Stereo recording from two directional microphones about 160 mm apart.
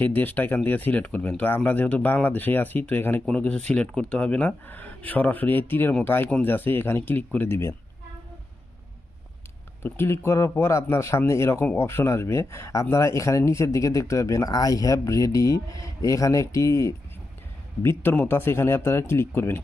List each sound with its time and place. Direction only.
0.0 s speech: 10° left (ahead or behind)
9.8 s a man's voice: 15° left (ahead or behind)